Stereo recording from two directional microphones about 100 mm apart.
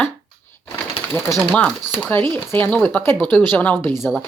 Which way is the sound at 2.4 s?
20° left (ahead or behind).